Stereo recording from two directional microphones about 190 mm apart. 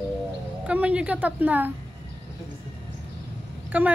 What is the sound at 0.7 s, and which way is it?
A woman's voice, 5° right (ahead or behind).